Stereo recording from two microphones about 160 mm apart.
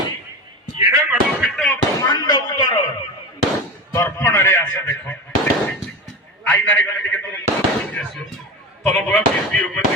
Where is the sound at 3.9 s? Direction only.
15° left (ahead or behind).